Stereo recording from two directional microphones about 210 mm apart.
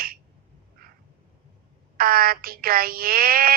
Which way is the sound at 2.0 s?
45° right (ahead or behind).